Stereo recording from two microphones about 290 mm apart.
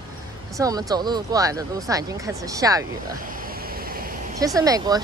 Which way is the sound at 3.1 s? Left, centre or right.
Right.